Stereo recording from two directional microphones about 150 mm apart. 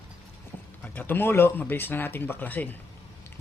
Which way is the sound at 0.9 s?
15° left (ahead or behind).